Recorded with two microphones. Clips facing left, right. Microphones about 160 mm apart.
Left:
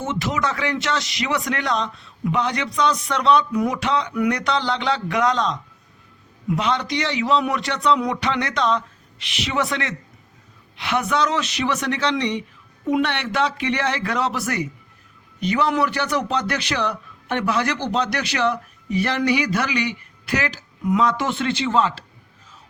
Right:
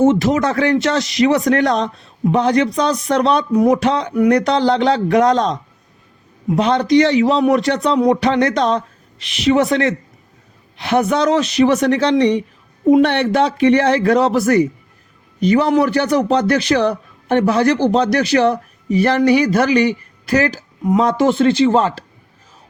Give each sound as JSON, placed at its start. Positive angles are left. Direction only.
{"t": 0.0, "sound": "speech", "side_deg": -45}